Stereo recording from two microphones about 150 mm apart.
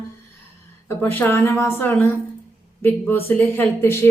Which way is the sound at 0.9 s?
15° left (ahead or behind).